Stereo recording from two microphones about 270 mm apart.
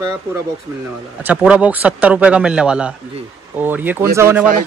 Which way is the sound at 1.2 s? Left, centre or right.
Centre.